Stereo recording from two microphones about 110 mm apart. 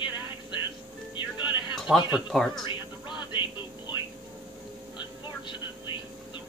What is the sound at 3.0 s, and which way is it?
Music, 45° left (ahead or behind).